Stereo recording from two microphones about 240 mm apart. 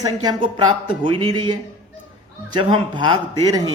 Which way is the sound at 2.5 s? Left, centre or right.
Centre.